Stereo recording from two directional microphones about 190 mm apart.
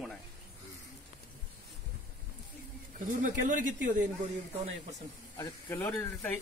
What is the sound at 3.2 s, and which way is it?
Speech, 45° right (ahead or behind).